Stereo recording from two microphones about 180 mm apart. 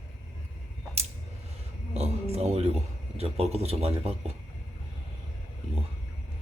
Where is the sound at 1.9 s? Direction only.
35° right (ahead or behind).